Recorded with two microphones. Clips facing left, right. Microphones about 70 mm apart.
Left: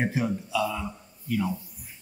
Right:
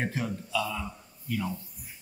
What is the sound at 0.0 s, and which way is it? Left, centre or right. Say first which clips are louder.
Speech: left 5 dB; centre.